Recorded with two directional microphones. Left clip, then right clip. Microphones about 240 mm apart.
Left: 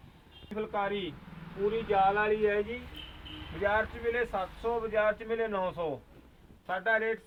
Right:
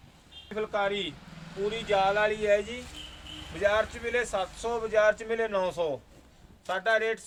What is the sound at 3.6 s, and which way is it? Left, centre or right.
A man's voice, right.